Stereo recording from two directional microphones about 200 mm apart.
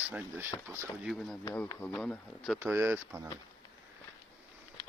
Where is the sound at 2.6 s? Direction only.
10° right (ahead or behind).